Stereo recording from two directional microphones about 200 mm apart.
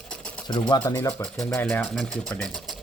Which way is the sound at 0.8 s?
15° left (ahead or behind).